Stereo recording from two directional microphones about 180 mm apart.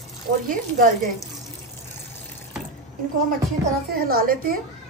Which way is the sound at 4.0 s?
55° right (ahead or behind).